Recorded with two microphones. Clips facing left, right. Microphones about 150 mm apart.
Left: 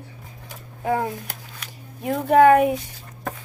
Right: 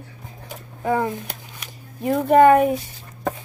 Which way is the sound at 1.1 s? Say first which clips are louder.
Right 3 dB; 15° right (ahead or behind).